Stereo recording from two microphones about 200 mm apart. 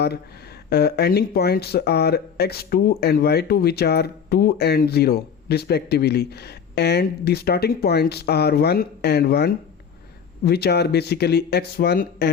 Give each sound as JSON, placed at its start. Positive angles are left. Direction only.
{"t": 0.0, "sound": "speech", "side_deg": 55}